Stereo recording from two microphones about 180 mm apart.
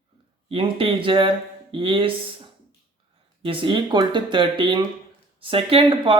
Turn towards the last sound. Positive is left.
turn(degrees=-30)  # may be behind; listen again after turning